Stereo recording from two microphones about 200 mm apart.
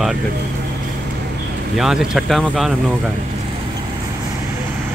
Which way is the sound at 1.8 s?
Centre (ahead or behind).